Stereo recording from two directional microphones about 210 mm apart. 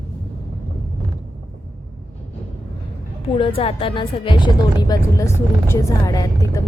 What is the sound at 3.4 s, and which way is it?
Speech, 25° left (ahead or behind).